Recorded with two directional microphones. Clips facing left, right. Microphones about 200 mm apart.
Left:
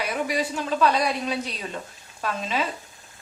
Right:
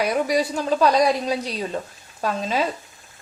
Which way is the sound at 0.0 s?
40° right (ahead or behind).